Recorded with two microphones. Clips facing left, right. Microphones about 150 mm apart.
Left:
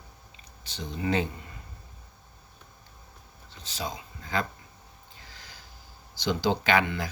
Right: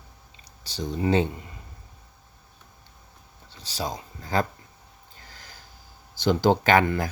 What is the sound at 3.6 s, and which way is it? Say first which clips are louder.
Speech: right 4 dB; 35° right (ahead or behind).